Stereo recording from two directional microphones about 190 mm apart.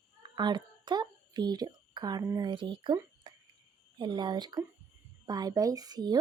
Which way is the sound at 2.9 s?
20° right (ahead or behind).